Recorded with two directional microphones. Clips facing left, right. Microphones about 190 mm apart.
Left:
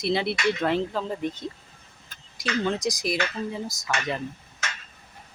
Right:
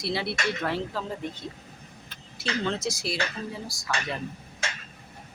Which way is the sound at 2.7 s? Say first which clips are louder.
Left 3 dB; 15° left (ahead or behind).